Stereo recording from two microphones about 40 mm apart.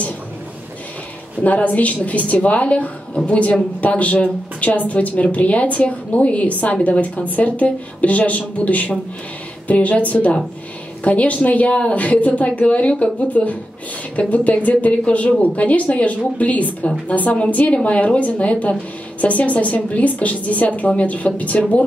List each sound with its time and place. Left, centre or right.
1.4 s a woman's voice: left